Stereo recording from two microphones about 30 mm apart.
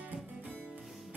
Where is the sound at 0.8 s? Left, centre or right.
Centre.